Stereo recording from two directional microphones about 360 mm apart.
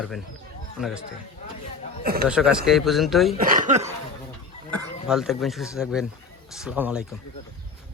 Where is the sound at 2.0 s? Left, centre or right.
Right.